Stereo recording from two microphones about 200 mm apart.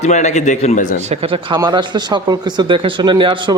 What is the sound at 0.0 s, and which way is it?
Speech, 35° left (ahead or behind).